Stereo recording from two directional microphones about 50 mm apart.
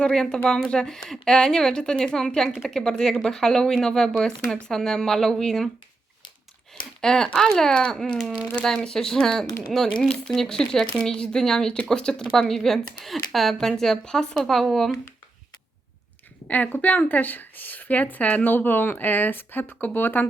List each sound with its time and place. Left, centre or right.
0.0 s speech: centre
7.0 s speech: centre
12.5 s speech: centre
16.5 s speech: left